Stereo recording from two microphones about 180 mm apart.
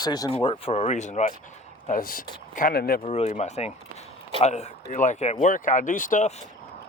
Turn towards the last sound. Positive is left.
turn(degrees=45)  # may be behind; listen again after turning